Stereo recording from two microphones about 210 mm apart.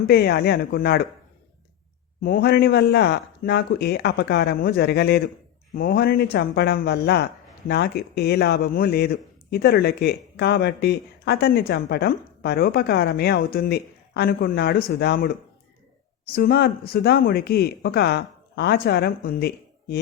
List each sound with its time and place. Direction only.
0.1 s a man's voice: 50° left (ahead or behind)
2.2 s a man's voice: 45° left (ahead or behind)